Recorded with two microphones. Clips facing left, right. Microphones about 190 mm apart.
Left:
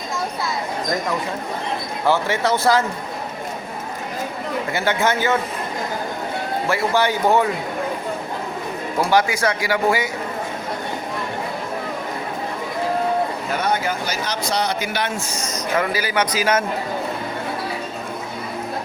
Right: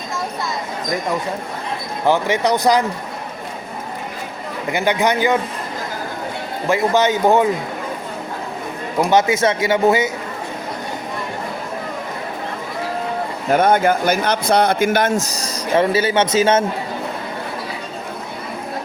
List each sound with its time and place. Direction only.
2.0 s speech: 15° right (ahead or behind)
4.7 s speech: 15° right (ahead or behind)
6.7 s speech: 20° right (ahead or behind)
9.0 s speech: 20° right (ahead or behind)
13.5 s speech: 50° right (ahead or behind); by 16.6 s 25° right (ahead or behind)